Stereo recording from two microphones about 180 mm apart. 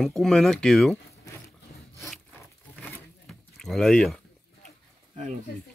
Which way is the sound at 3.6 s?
Centre (ahead or behind).